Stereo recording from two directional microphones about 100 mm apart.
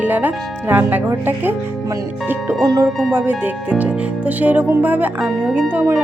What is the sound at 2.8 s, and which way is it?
Speech, 5° left (ahead or behind).